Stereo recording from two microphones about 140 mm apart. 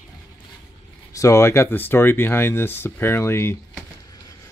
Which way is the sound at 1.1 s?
20° left (ahead or behind).